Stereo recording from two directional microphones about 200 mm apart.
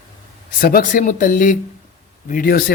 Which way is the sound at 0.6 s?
45° left (ahead or behind).